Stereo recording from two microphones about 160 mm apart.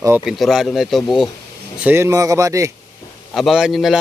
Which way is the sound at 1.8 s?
15° right (ahead or behind).